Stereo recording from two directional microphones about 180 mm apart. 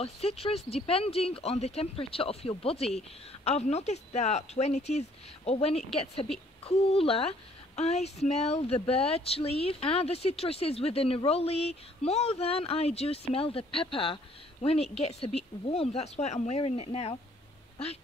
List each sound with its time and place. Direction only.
0.0 s a woman's voice: 35° left (ahead or behind)